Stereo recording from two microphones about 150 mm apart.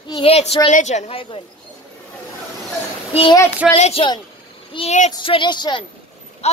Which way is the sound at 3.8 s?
45° left (ahead or behind).